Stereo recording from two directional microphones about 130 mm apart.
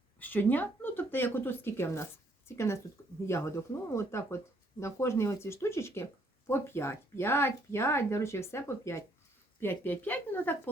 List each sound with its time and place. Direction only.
0.2 s speech: 15° left (ahead or behind)